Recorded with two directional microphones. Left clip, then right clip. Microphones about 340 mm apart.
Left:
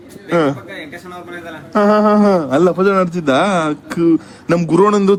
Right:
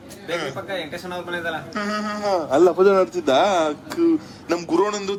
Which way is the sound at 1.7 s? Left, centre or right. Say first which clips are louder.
Left 19 dB; centre.